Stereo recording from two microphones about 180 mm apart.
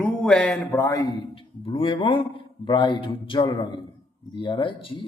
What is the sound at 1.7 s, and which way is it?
A man's voice, 30° left (ahead or behind).